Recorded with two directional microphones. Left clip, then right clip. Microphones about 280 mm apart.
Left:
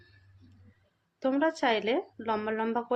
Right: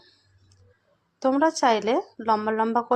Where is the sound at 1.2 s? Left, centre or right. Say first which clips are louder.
Right 7 dB; centre.